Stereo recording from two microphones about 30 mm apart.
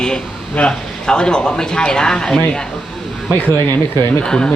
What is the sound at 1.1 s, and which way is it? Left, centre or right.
Speech, left.